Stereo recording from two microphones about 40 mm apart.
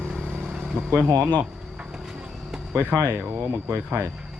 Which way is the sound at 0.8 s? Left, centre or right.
Right.